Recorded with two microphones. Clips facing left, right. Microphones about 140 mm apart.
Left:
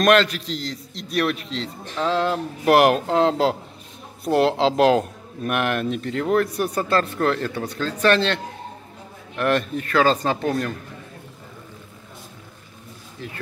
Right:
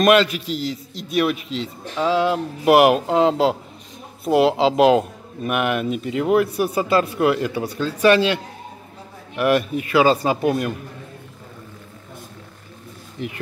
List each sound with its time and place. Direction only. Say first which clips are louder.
0.0 s a man's voice: right 2 dB; 5° right (ahead or behind)
13.2 s speech: right 6 dB; 20° right (ahead or behind)